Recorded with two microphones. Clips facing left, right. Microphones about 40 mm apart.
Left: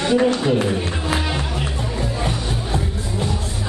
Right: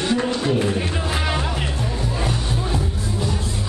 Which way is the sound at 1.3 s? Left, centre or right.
Centre.